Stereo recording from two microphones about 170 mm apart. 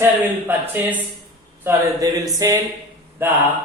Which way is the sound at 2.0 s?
20° right (ahead or behind).